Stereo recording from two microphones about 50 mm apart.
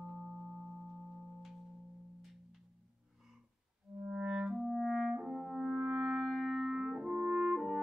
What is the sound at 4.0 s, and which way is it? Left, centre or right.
Music, centre.